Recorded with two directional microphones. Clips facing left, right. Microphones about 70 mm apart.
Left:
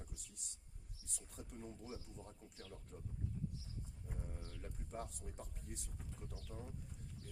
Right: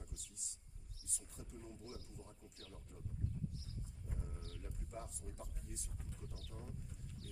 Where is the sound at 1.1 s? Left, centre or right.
Left.